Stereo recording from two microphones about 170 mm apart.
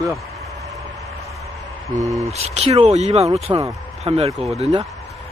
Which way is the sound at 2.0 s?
20° right (ahead or behind).